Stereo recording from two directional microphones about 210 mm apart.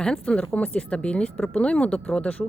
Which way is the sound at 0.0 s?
5° left (ahead or behind).